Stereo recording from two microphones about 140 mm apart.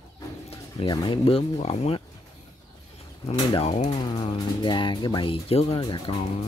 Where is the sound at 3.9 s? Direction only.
30° left (ahead or behind).